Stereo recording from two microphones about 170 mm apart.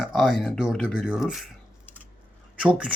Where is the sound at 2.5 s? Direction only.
5° right (ahead or behind).